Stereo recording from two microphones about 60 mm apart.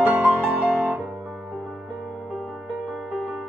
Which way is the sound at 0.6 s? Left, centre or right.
Right.